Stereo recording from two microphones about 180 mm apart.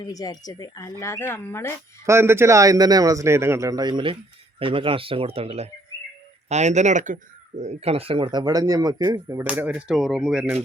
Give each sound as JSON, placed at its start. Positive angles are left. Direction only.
{"t": 0.0, "sound": "speech", "side_deg": 20}
{"t": 2.0, "sound": "a man's voice", "side_deg": -15}
{"t": 9.4, "sound": "speech", "side_deg": -10}